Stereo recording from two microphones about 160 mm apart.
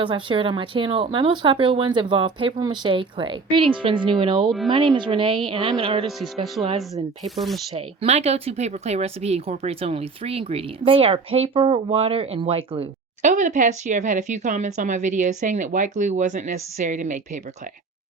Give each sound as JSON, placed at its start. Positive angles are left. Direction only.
{"t": 0.0, "sound": "speech", "side_deg": -30}
{"t": 6.1, "sound": "speech", "side_deg": 0}
{"t": 7.7, "sound": "speech", "side_deg": -40}
{"t": 13.2, "sound": "speech", "side_deg": -50}